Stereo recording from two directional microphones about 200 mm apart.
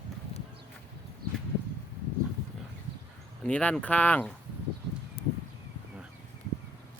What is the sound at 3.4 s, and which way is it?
Speech, 5° left (ahead or behind).